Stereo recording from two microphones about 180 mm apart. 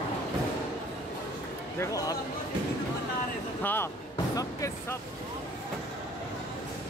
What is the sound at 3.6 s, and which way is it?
Speech, 10° left (ahead or behind).